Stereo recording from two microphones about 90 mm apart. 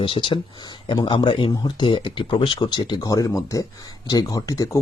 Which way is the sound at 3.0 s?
40° left (ahead or behind).